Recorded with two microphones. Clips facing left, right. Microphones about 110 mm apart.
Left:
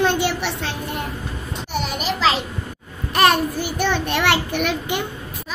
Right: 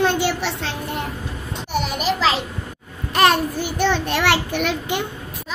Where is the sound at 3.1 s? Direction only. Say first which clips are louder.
Even; 15° left (ahead or behind).